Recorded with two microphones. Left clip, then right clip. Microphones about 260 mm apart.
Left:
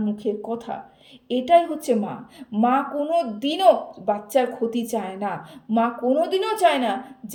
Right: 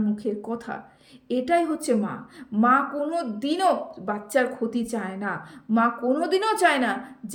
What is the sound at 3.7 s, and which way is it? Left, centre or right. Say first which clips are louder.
Speech: left 5 dB; right.